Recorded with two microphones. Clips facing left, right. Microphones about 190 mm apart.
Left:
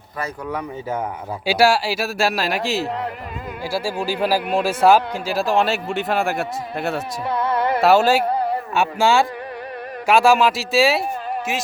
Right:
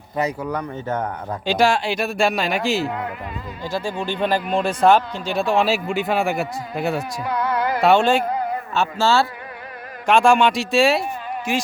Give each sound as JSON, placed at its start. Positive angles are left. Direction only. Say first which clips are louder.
{"t": 0.4, "sound": "speech", "louder": "right 1 dB", "side_deg": 5}
{"t": 7.3, "sound": "music", "louder": "left 2 dB", "side_deg": 25}
{"t": 7.8, "sound": "speech", "louder": "left 1 dB", "side_deg": 5}
{"t": 8.3, "sound": "a sound", "louder": "left 3 dB", "side_deg": 30}
{"t": 8.7, "sound": "speech", "louder": "left 1 dB", "side_deg": 15}